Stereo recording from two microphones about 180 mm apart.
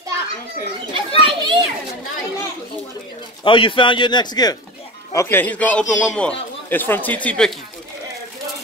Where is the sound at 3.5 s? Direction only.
30° left (ahead or behind).